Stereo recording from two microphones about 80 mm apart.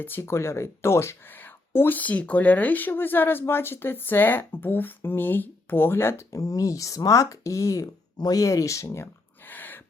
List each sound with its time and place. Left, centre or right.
0.0 s speech: left
6.3 s speech: left
9.5 s dog: left